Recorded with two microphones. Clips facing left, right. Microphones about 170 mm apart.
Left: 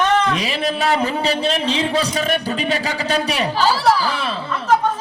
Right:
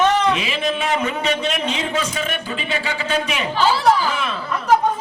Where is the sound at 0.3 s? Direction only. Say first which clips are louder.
Left 1 dB; 35° left (ahead or behind).